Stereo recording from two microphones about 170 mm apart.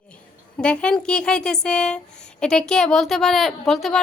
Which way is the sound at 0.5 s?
5° left (ahead or behind).